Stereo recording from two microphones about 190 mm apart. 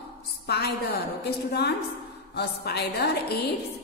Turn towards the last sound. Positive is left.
turn(degrees=55)  # may be behind; listen again after turning